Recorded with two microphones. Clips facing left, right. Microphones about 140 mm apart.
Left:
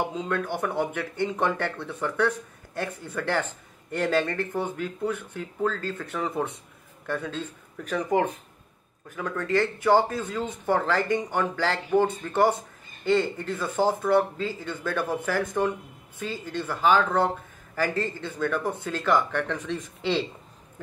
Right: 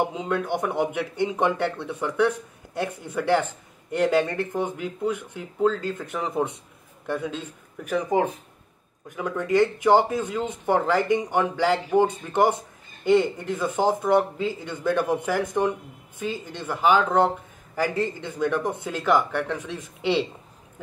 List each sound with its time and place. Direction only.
0.1 s speech: 15° right (ahead or behind)